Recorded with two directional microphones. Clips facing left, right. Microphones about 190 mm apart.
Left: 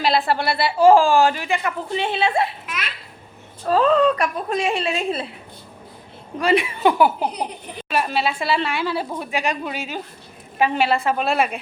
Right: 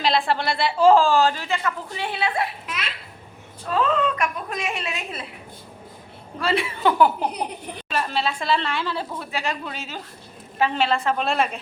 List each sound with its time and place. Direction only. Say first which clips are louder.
0.0 s a woman's voice: left 2 dB; 5° left (ahead or behind); by 2.6 s 25° left (ahead or behind)
3.7 s a woman's voice: left 6 dB; 35° left (ahead or behind)
6.4 s a woman's voice: left 4 dB; 15° left (ahead or behind)